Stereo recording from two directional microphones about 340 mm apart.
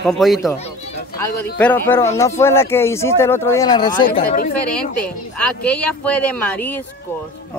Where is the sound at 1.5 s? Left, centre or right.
Centre; by 4.5 s left.